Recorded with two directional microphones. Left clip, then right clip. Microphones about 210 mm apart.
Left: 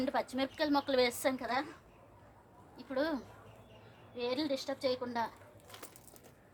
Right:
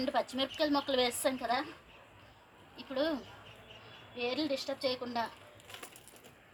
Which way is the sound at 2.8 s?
20° left (ahead or behind).